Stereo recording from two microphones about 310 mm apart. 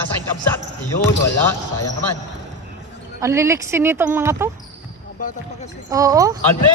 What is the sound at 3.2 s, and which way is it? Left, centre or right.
Speech, centre.